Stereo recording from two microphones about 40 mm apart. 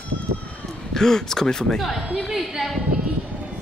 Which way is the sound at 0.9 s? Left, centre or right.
Centre.